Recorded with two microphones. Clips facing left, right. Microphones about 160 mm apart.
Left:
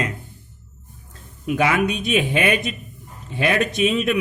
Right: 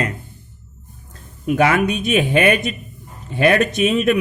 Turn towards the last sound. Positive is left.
turn(degrees=-50)  # may be behind; listen again after turning